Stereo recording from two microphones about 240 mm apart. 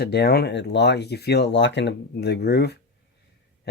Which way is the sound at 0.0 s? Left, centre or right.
Left.